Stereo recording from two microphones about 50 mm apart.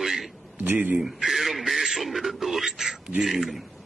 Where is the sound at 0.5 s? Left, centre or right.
Right.